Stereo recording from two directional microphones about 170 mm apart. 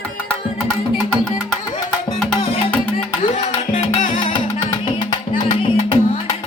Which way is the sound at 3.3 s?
40° left (ahead or behind).